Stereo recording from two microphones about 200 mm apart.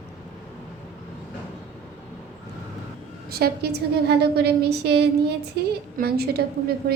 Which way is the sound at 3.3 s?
50° right (ahead or behind).